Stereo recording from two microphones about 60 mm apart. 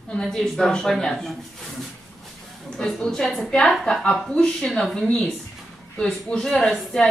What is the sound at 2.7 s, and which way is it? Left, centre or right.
A woman's voice, centre.